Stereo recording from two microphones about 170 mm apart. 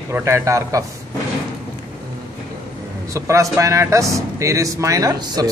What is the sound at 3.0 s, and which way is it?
Speech, 20° right (ahead or behind).